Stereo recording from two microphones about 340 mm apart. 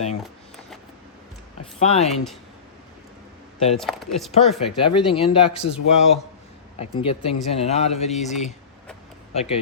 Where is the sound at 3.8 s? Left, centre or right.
Centre.